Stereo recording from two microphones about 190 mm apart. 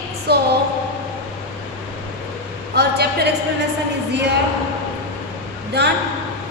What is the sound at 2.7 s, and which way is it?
Speech, 60° right (ahead or behind).